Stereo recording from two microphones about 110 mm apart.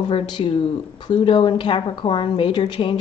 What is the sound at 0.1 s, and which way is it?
Speech, 45° left (ahead or behind).